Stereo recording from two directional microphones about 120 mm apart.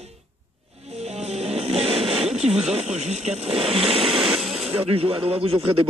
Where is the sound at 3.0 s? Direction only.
65° right (ahead or behind).